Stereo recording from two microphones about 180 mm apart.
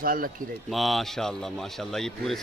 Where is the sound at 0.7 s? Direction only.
Centre (ahead or behind).